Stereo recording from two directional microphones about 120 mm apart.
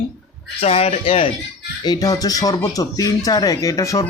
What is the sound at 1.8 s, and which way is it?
Speech, 35° left (ahead or behind).